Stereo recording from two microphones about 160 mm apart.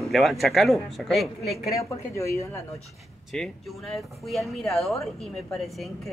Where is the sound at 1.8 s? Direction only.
20° left (ahead or behind).